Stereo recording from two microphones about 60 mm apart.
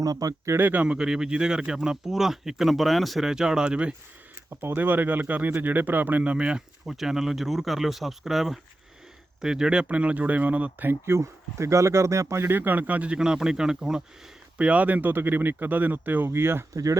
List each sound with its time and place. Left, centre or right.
0.0 s speech: right
0.6 s speech: right
0.9 s speech: centre
4.4 s speech: right
6.3 s speech: centre
11.0 s speech: right
12.5 s speech: right; by 14.0 s centre
14.6 s speech: right
16.7 s speech: right